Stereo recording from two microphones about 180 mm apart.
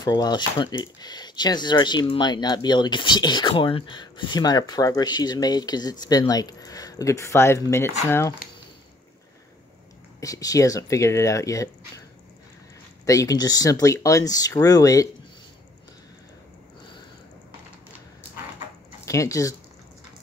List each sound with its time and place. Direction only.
0.0 s speech: 20° left (ahead or behind)
10.2 s speech: 20° left (ahead or behind)
13.0 s speech: 20° left (ahead or behind)
19.0 s speech: 15° left (ahead or behind)